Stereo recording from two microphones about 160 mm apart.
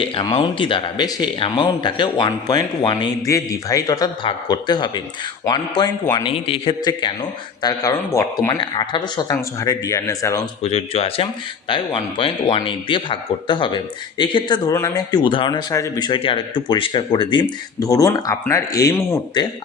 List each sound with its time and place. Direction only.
0.0 s a man's voice: 35° left (ahead or behind)
10.6 s a man's voice: 40° left (ahead or behind); by 19.5 s 20° left (ahead or behind)